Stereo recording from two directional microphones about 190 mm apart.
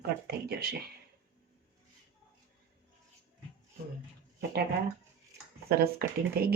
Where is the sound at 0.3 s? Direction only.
55° right (ahead or behind).